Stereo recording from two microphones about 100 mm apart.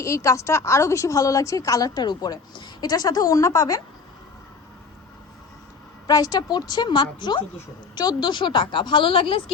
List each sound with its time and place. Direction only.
0.0 s a woman's voice: 35° left (ahead or behind)
6.1 s a woman's voice: 40° left (ahead or behind); by 9.4 s 60° left (ahead or behind)